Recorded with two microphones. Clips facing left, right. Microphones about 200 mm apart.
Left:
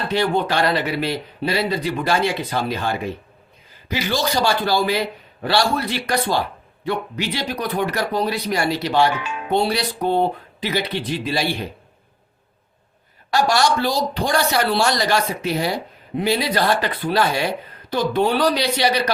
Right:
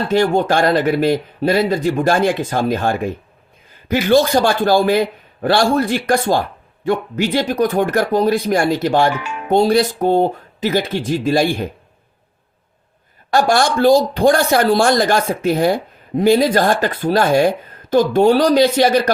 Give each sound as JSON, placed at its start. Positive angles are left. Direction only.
{"t": 0.1, "sound": "a man's voice", "side_deg": -45}
{"t": 13.3, "sound": "a man's voice", "side_deg": -50}